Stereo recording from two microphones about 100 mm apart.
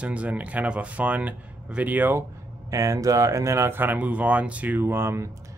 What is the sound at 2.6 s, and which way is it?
Speech, 35° right (ahead or behind).